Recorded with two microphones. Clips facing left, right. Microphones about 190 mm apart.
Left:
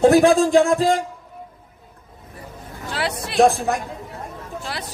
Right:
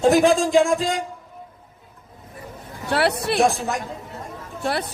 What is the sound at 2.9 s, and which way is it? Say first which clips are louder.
Speech: right 3 dB; 60° right (ahead or behind).